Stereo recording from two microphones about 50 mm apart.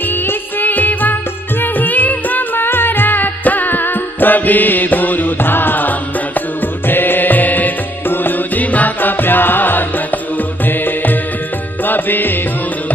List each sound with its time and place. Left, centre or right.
0.1 s music: left